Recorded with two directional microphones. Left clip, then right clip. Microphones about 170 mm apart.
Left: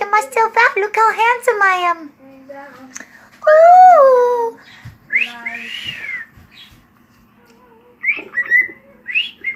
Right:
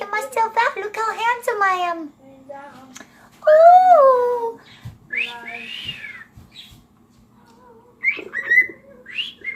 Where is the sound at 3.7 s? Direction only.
40° left (ahead or behind).